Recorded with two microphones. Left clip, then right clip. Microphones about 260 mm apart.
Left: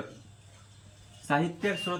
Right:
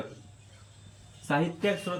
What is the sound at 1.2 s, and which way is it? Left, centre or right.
Speech, centre.